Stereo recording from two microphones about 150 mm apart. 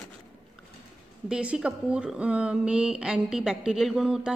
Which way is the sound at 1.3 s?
5° right (ahead or behind).